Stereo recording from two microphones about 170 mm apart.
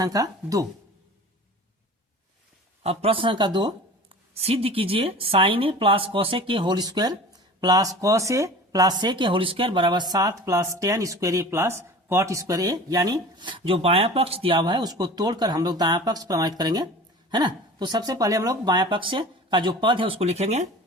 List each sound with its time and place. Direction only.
0.0 s speech: 20° right (ahead or behind)
2.8 s speech: 35° right (ahead or behind)